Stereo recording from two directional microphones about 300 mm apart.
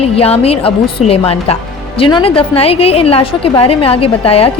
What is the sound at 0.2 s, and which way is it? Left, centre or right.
A woman's voice, centre.